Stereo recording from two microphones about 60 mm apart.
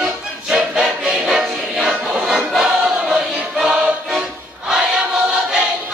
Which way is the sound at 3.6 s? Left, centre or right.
Centre.